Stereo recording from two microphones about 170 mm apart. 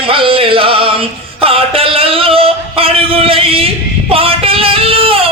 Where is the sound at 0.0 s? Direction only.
30° right (ahead or behind).